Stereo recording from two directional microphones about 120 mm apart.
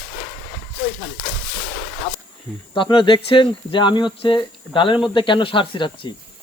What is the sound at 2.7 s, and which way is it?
Speech, 45° left (ahead or behind).